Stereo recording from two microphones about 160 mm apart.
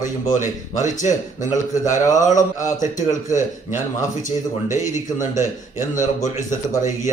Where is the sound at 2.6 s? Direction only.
55° left (ahead or behind).